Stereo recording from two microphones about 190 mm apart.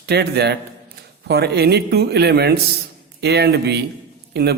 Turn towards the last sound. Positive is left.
turn(degrees=-60)  # may be behind; listen again after turning